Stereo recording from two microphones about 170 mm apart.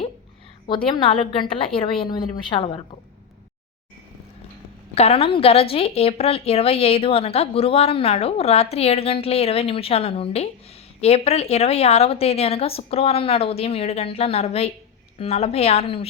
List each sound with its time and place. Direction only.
0.9 s a woman's voice: 30° left (ahead or behind)
4.9 s a woman's voice: 35° left (ahead or behind)